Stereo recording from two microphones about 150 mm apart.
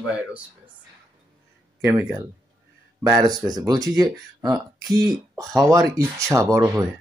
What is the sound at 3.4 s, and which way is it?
Speech, 25° right (ahead or behind).